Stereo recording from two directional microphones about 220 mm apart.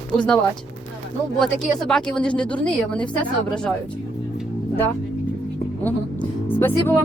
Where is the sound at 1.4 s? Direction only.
Centre (ahead or behind).